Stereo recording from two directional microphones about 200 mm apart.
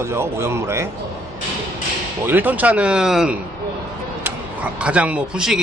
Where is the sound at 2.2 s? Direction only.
10° right (ahead or behind).